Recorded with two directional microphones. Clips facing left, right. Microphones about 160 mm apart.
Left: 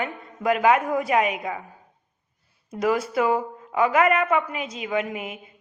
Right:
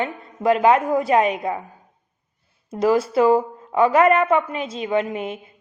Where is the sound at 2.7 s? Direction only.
30° right (ahead or behind).